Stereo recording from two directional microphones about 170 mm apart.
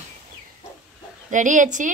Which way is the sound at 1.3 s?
45° right (ahead or behind).